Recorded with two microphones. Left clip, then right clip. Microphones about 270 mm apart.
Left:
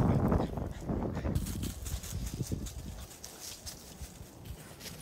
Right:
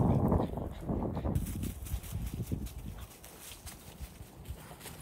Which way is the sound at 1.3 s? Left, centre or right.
Left.